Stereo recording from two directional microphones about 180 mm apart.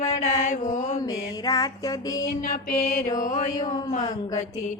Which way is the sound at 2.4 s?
50° left (ahead or behind).